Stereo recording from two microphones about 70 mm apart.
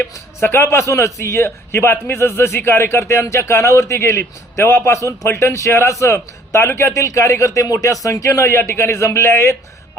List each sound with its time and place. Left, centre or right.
0.4 s a man's voice: left